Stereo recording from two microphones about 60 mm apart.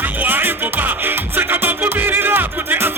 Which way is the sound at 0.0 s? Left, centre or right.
Right.